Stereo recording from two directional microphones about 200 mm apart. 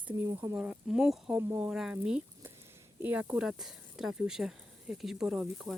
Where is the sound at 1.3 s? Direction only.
15° right (ahead or behind).